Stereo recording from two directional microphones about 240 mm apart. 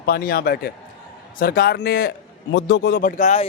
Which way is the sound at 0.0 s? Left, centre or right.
Left.